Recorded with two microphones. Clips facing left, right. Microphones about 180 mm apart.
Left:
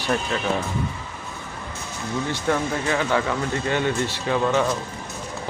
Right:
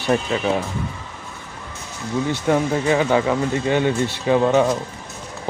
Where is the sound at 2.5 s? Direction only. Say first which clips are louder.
Right 5 dB; 15° right (ahead or behind).